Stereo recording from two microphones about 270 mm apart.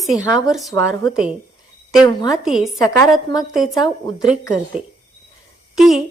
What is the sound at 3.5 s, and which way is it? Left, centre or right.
Speech, centre.